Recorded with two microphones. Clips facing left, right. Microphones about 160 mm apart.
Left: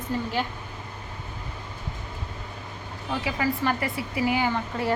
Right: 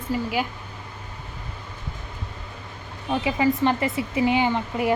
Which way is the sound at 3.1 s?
20° right (ahead or behind).